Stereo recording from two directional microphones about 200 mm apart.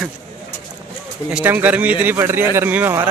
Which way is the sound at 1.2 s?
10° right (ahead or behind).